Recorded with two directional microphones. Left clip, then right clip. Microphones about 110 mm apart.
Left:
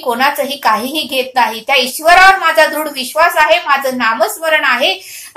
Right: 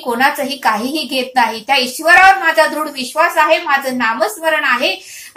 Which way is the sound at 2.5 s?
30° left (ahead or behind).